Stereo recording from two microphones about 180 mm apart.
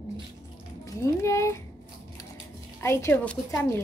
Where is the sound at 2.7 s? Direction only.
15° left (ahead or behind).